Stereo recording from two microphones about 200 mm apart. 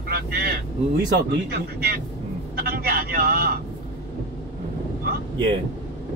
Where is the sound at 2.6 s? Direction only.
50° right (ahead or behind).